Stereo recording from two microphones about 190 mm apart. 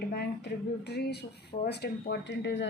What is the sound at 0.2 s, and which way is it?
Speech, 60° left (ahead or behind).